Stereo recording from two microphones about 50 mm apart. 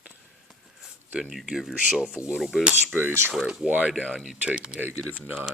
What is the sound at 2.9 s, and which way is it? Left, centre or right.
Cutlery, right.